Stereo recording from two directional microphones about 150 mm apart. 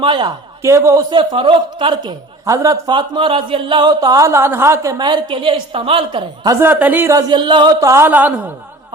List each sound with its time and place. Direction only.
0.0 s a woman's voice: 30° right (ahead or behind)
0.6 s a man's voice: 20° right (ahead or behind)
1.1 s a man's voice: 35° right (ahead or behind)
6.6 s a man's voice: 10° right (ahead or behind)